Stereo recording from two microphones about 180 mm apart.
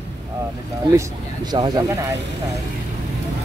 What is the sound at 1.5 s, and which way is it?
Speech, 25° right (ahead or behind).